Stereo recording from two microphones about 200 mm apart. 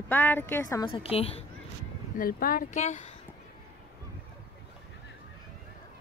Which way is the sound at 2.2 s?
45° left (ahead or behind).